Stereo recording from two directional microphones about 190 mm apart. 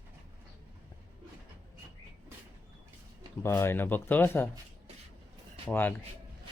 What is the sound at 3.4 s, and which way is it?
Speech, 15° left (ahead or behind).